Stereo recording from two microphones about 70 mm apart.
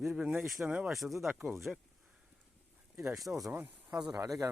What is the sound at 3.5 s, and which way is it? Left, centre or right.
Speech, right.